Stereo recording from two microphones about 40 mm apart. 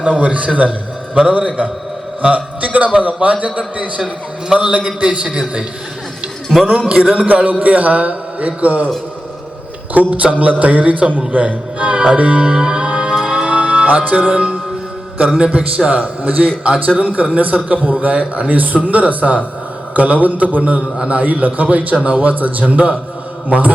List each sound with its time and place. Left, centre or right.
0.2 s a man's voice: right
4.5 s a man's voice: right
6.7 s a man's voice: right
7.6 s a man's voice: right
9.9 s a man's voice: right
12.5 s music: right
14.0 s a man's voice: right